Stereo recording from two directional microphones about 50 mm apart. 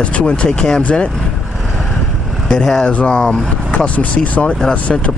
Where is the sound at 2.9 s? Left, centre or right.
Left.